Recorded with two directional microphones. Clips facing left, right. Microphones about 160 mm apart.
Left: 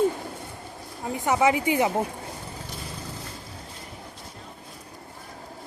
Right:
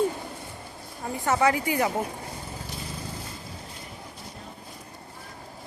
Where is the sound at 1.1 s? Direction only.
20° left (ahead or behind).